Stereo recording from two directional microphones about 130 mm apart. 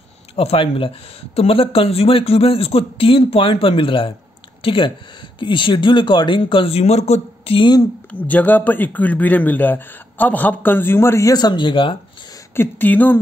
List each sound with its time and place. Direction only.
0.4 s speech: 45° left (ahead or behind)
8.1 s speech: 10° left (ahead or behind); by 12.0 s 40° left (ahead or behind)
12.5 s speech: 15° left (ahead or behind)